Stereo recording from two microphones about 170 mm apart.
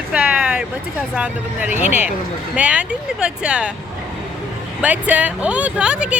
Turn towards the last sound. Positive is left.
turn(degrees=-5)  # may be behind; listen again after turning